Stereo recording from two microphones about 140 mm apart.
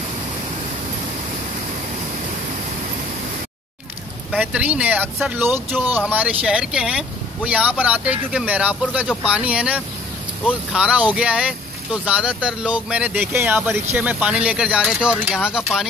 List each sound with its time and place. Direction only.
4.3 s speech: 10° right (ahead or behind)